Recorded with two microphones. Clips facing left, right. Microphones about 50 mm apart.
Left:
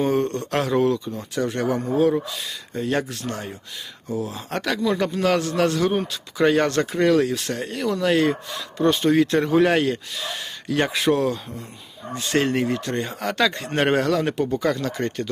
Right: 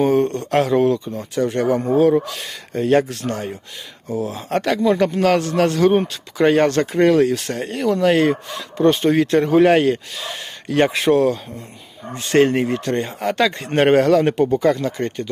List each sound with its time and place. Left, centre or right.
0.0 s speech: right
14.9 s speech: centre